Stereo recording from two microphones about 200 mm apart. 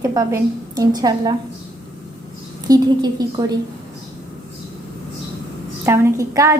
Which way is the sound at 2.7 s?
20° right (ahead or behind).